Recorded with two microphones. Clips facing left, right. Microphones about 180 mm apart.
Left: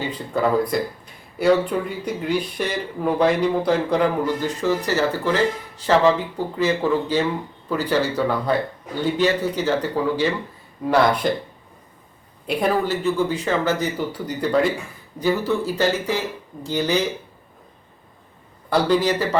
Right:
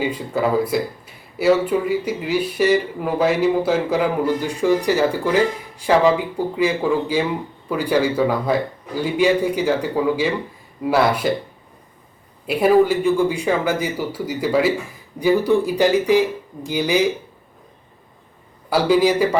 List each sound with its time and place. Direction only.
0.0 s speech: 10° right (ahead or behind)
12.5 s speech: 5° right (ahead or behind)
18.7 s speech: 10° right (ahead or behind)